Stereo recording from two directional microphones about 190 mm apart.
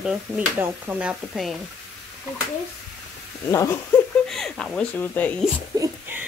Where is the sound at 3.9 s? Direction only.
10° left (ahead or behind).